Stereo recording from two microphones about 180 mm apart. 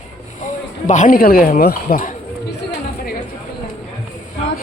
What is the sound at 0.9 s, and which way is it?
Speech, 45° left (ahead or behind).